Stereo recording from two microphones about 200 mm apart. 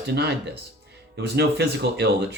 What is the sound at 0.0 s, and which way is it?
Speech, 55° right (ahead or behind).